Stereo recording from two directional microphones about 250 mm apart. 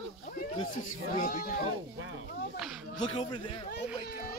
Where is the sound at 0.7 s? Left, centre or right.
Left.